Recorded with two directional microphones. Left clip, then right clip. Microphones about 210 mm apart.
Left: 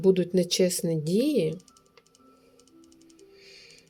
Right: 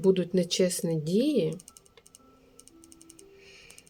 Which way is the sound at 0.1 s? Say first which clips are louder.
Left 2 dB; 10° left (ahead or behind).